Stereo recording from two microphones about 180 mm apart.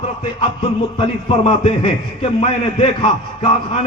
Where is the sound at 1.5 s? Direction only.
30° left (ahead or behind).